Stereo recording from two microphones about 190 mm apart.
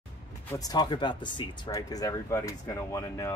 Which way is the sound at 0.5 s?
20° left (ahead or behind).